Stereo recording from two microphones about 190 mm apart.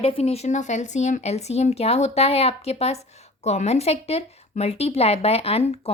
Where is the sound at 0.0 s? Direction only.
30° left (ahead or behind).